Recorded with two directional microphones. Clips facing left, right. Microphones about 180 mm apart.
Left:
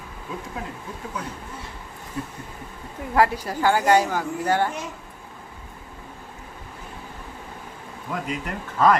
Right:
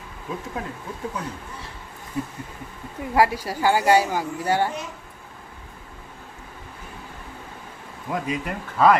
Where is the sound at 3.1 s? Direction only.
10° right (ahead or behind).